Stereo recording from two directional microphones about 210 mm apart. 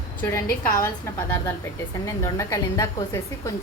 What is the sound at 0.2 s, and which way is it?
A woman's voice, 10° left (ahead or behind).